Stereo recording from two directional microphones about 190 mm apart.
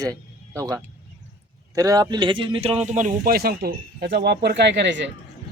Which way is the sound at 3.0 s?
50° right (ahead or behind).